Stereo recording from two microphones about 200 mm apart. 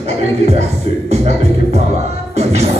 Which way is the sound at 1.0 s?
35° right (ahead or behind).